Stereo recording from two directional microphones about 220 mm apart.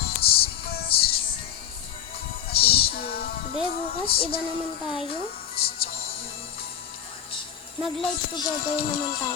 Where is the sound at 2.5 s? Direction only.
25° left (ahead or behind).